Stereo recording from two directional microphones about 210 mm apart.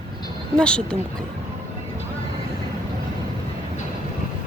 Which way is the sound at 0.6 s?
5° left (ahead or behind).